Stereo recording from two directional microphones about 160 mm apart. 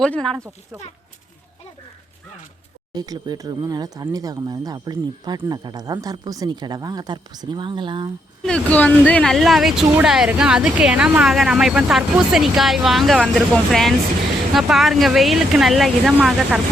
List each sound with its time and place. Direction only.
0.0 s speech: 5° left (ahead or behind)
0.3 s speech: 20° right (ahead or behind)
2.9 s speech: 25° right (ahead or behind)
8.4 s speech: 10° left (ahead or behind); by 16.6 s 10° right (ahead or behind)